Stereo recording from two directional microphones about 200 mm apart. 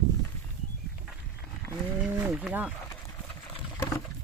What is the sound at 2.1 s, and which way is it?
Speech, 10° right (ahead or behind).